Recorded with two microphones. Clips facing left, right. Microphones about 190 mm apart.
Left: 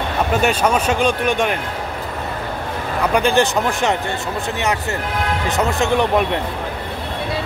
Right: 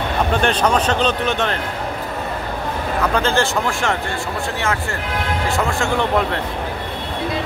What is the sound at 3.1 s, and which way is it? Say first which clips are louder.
Speech: left 4 dB; 15° left (ahead or behind).